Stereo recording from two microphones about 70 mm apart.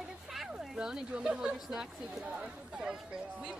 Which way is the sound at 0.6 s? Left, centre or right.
Centre.